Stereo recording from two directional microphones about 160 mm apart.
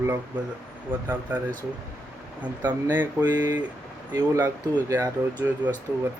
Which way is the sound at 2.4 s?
10° right (ahead or behind).